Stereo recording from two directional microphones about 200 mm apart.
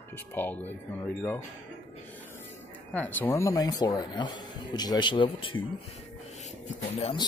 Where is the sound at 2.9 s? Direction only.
10° left (ahead or behind); by 5.6 s 25° left (ahead or behind).